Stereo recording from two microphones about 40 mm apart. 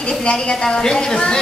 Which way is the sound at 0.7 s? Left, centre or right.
Centre.